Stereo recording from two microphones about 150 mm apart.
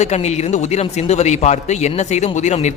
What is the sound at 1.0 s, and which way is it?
Speech, 45° left (ahead or behind).